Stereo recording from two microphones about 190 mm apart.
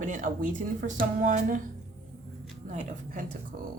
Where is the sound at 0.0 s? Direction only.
45° right (ahead or behind).